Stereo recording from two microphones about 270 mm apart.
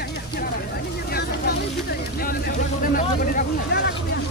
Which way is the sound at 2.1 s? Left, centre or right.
Left.